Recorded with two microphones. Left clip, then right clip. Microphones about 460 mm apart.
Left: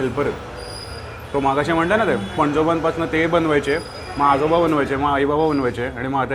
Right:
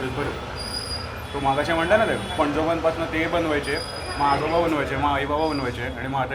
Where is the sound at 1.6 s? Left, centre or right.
Left.